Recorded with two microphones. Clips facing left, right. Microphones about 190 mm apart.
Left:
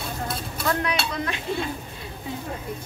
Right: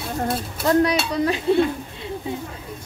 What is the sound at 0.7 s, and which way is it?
Speech, 35° right (ahead or behind).